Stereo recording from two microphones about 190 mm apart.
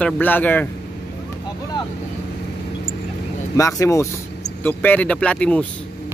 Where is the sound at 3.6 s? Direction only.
15° left (ahead or behind).